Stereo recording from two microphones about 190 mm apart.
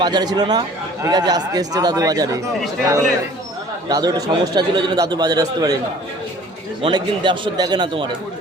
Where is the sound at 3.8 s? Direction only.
20° right (ahead or behind).